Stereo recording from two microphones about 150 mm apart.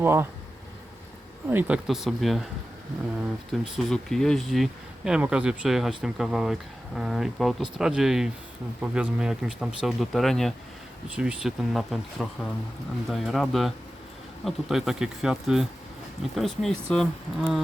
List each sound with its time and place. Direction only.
0.0 s speech: 15° right (ahead or behind)
1.5 s speech: 10° right (ahead or behind)
3.5 s speech: centre (ahead or behind)